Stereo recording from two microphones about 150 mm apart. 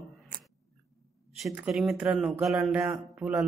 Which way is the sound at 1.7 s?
5° right (ahead or behind).